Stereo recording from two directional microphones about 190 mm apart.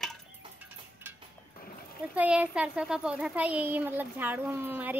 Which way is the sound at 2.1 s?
5° right (ahead or behind).